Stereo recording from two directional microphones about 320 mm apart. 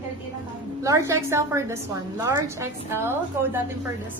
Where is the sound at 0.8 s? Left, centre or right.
Centre.